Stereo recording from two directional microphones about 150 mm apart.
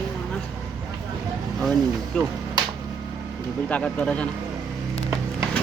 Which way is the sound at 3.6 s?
10° left (ahead or behind).